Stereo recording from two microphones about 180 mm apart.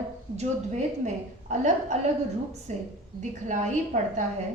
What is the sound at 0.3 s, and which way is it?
A woman's voice, 40° right (ahead or behind).